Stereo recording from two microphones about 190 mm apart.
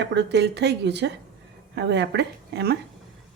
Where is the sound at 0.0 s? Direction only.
65° right (ahead or behind).